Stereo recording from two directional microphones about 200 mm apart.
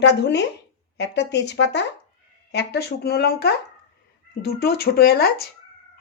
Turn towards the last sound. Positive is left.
turn(degrees=50)  # may be behind; listen again after turning